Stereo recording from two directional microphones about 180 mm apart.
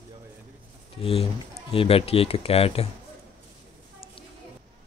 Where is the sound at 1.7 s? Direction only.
30° left (ahead or behind).